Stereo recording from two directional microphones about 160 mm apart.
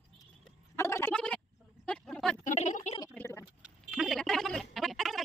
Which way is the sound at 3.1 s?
15° left (ahead or behind).